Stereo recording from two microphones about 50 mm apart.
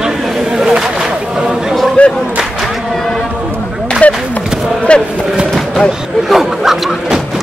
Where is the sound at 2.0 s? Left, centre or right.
Left.